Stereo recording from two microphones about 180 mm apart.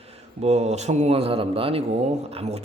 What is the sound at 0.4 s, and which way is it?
A man's voice, 40° right (ahead or behind).